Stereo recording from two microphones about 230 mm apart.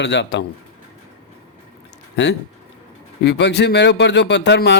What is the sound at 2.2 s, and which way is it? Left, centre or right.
Speech, left.